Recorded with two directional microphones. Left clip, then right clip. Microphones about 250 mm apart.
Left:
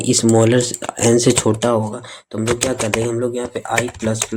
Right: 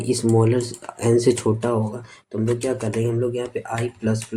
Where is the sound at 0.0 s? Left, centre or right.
Left.